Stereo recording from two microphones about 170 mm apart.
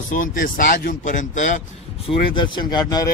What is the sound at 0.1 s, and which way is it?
Speech, 50° left (ahead or behind).